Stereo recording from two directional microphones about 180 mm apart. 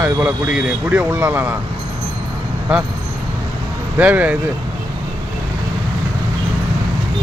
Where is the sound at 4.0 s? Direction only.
10° right (ahead or behind).